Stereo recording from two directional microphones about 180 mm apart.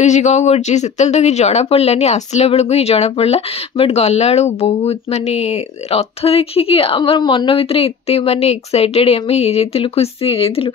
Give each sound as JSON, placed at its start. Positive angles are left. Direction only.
{"t": 0.0, "sound": "speech", "side_deg": 40}